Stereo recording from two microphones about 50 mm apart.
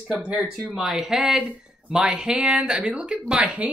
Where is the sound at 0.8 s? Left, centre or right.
Centre.